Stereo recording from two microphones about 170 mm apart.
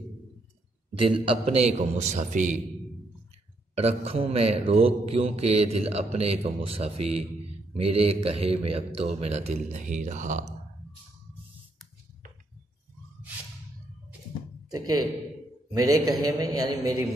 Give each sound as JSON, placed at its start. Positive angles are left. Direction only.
{"t": 1.2, "sound": "mantra", "side_deg": -35}
{"t": 3.7, "sound": "mantra", "side_deg": -40}
{"t": 14.7, "sound": "a man's voice", "side_deg": -25}